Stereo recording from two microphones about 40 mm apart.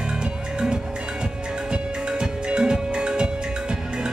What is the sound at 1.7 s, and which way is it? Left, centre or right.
Music, right.